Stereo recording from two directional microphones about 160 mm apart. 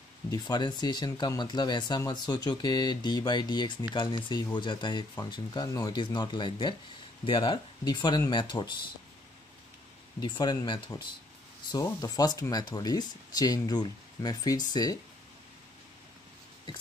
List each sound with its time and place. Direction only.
0.3 s speech: 25° left (ahead or behind)
10.2 s speech: 30° left (ahead or behind)